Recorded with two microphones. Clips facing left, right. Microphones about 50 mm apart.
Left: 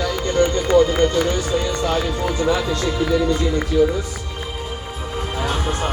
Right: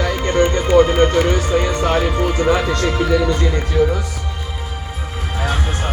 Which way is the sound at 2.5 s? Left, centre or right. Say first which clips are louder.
Right 3 dB; right.